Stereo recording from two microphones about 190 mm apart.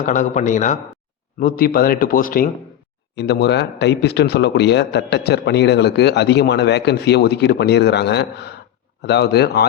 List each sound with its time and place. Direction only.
0.0 s a man's voice: 40° left (ahead or behind)
3.2 s speech: 60° left (ahead or behind)